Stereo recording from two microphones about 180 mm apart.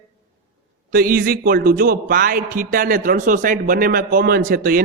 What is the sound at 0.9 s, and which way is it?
A man's voice, 55° right (ahead or behind).